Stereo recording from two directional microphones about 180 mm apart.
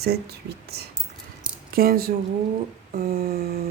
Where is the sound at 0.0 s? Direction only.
60° right (ahead or behind).